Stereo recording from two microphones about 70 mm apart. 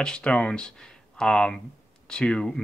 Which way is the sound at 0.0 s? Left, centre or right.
Centre.